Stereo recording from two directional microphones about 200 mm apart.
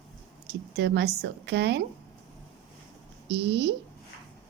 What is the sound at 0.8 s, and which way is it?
A woman's voice, 60° right (ahead or behind).